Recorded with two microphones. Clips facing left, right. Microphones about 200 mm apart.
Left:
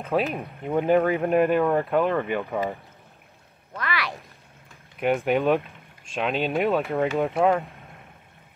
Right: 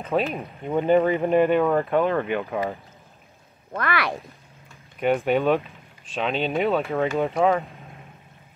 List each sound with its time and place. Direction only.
0.0 s speech: centre (ahead or behind)
3.7 s speech: 55° right (ahead or behind)
5.0 s speech: centre (ahead or behind)